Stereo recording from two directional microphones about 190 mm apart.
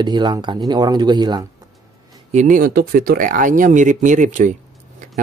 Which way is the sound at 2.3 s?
45° right (ahead or behind).